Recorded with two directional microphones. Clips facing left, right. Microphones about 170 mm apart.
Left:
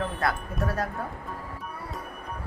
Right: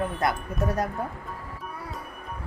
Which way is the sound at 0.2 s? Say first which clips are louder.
Right 2 dB; 20° right (ahead or behind).